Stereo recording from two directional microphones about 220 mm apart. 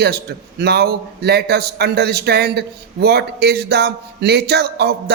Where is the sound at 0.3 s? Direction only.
45° right (ahead or behind).